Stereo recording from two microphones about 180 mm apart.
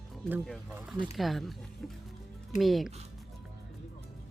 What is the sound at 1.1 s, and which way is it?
Speech, centre (ahead or behind).